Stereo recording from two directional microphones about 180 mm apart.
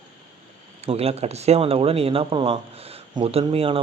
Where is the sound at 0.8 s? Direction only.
35° right (ahead or behind).